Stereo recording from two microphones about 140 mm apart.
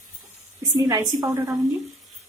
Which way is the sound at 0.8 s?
25° right (ahead or behind).